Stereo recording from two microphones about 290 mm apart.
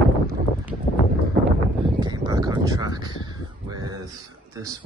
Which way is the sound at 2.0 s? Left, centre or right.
Centre.